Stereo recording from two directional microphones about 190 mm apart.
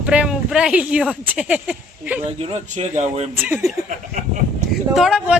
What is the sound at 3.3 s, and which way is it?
Speech, 10° right (ahead or behind).